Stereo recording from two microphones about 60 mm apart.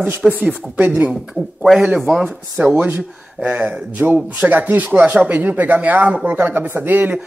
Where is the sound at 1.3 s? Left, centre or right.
Centre.